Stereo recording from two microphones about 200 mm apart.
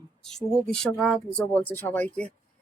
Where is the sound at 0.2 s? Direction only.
5° left (ahead or behind).